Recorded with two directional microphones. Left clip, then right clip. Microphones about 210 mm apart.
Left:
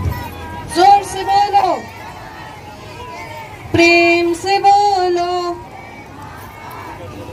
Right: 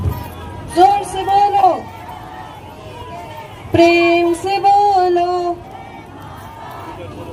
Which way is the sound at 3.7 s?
15° right (ahead or behind).